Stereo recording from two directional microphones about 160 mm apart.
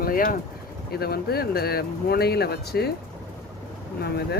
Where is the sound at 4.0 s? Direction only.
85° left.